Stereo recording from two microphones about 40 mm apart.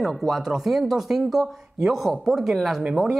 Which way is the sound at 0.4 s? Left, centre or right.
Centre.